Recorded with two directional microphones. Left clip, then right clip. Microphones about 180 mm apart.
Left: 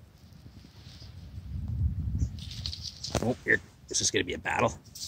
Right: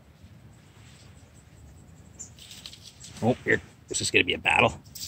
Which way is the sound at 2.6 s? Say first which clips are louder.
Left 8 dB; 45° right (ahead or behind).